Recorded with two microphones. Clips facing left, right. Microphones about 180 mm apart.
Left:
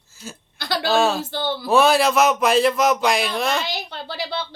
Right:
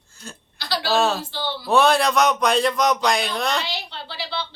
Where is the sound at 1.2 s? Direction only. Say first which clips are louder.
Left 4 dB; 50° left (ahead or behind).